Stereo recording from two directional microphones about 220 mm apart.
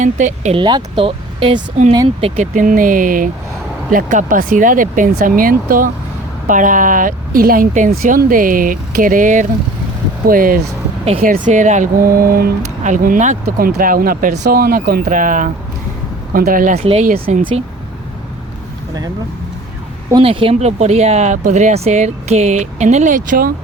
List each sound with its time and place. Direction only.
0.0 s speech: 35° right (ahead or behind)
0.6 s speech: 20° right (ahead or behind); by 17.5 s 40° right (ahead or behind)
20.1 s speech: 20° right (ahead or behind); by 23.5 s 35° right (ahead or behind)